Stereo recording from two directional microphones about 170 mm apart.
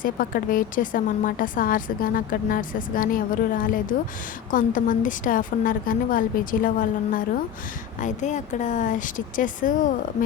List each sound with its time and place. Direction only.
0.0 s a woman's voice: 55° left (ahead or behind)